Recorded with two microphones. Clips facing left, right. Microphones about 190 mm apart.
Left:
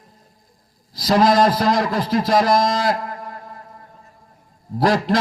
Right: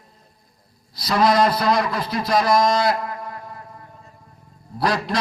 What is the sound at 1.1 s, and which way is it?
Speech, 45° left (ahead or behind).